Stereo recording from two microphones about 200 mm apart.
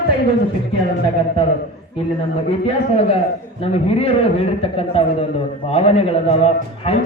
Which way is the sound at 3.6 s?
30° left (ahead or behind).